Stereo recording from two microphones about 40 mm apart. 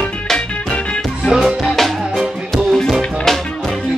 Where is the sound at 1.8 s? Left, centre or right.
Centre.